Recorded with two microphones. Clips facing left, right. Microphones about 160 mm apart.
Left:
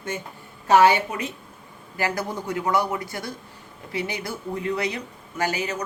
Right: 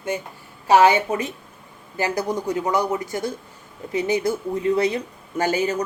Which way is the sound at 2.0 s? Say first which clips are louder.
Right 4 dB; 20° right (ahead or behind).